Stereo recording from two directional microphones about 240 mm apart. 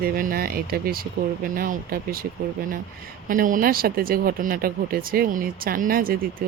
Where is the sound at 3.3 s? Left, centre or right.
Right.